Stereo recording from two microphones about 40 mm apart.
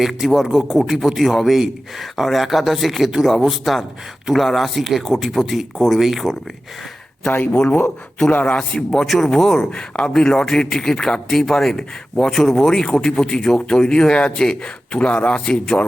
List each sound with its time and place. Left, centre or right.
0.0 s a man's voice: centre
7.5 s speech: left
8.3 s a man's voice: left
8.5 s a man's voice: centre; by 15.9 s left